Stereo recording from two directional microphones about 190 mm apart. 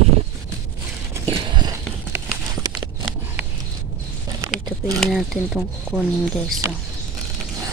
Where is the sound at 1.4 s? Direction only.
25° right (ahead or behind).